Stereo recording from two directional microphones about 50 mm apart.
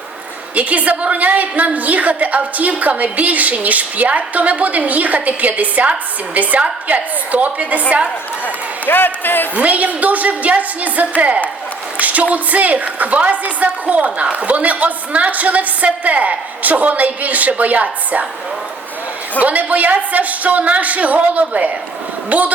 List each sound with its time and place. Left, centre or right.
0.5 s a woman's voice: right
8.4 s speech: left
9.6 s a woman's voice: right
11.9 s a sound: right
12.3 s a woman's voice: right
19.4 s a woman's voice: right